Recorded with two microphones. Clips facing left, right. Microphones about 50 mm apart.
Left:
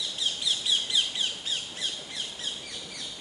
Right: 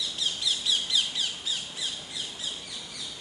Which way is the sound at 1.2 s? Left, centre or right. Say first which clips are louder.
Even; left.